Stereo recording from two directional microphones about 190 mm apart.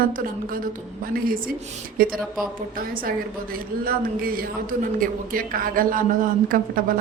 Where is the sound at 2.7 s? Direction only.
50° right (ahead or behind).